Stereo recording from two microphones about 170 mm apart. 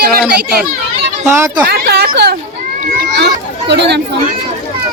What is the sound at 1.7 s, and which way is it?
Speech, 70° right (ahead or behind).